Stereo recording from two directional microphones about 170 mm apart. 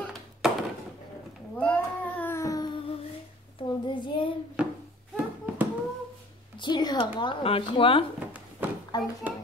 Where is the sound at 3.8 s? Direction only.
30° left (ahead or behind).